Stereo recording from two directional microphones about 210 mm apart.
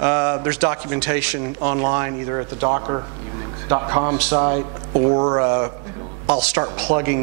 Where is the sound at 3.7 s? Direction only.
20° right (ahead or behind).